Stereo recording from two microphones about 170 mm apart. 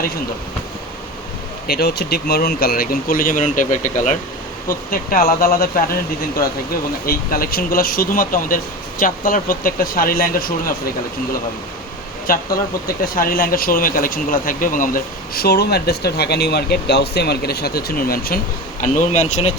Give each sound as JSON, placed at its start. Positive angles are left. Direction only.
{"t": 1.6, "sound": "speech", "side_deg": 65}
{"t": 12.3, "sound": "speech", "side_deg": 60}
{"t": 18.8, "sound": "speech", "side_deg": 45}